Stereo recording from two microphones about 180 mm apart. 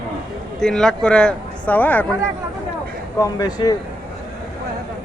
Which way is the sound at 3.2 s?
20° left (ahead or behind).